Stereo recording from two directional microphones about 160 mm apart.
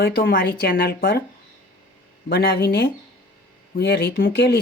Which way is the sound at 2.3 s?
75° left (ahead or behind).